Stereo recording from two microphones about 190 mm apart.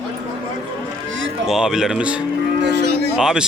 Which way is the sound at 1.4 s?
5° right (ahead or behind).